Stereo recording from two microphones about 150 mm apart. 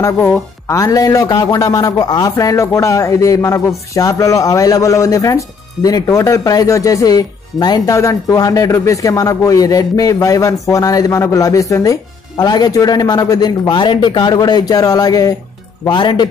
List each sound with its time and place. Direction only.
0.0 s a man's voice: 15° left (ahead or behind)